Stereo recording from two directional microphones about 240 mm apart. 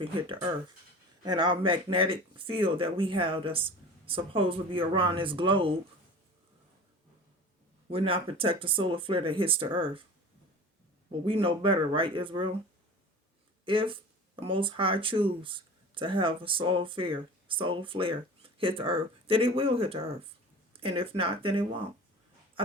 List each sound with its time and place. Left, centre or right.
1.2 s speech: centre
7.9 s speech: right
11.3 s speech: right
13.7 s speech: right